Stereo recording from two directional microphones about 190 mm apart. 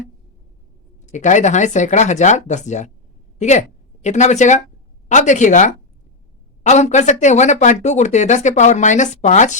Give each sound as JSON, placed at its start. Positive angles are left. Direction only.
{"t": 1.0, "sound": "speech", "side_deg": 40}
{"t": 4.0, "sound": "speech", "side_deg": 35}